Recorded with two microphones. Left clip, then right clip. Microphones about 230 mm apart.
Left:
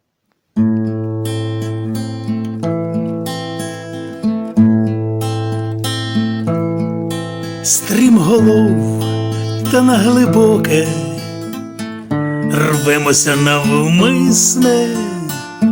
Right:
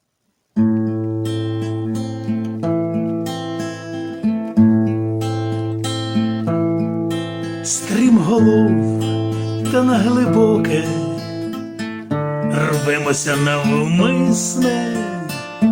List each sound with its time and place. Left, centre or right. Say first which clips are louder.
1.9 s music: left 1 dB; left
4.2 s music: left 2 dB; left
6.3 s music: even; left
7.7 s music: left 4 dB; left
8.6 s music: left 1 dB; left
9.7 s music: left 4 dB; left
12.5 s music: left 5 dB; left